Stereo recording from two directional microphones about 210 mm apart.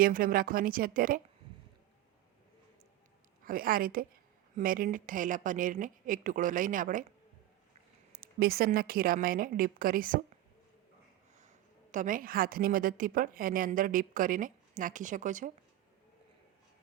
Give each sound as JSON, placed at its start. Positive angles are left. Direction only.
{"t": 0.0, "sound": "a woman's voice", "side_deg": -45}
{"t": 3.4, "sound": "a woman's voice", "side_deg": -45}
{"t": 8.2, "sound": "a woman's voice", "side_deg": -45}
{"t": 11.3, "sound": "a woman's voice", "side_deg": -35}